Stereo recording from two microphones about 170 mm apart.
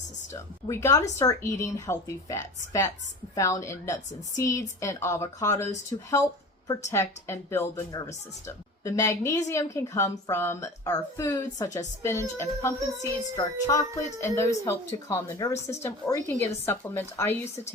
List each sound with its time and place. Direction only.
0.3 s speech: 15° left (ahead or behind)